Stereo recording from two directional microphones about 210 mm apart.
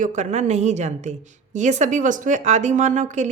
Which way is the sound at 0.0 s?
35° right (ahead or behind).